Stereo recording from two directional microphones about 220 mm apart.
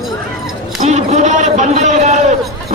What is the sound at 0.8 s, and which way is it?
A man's voice, 30° right (ahead or behind).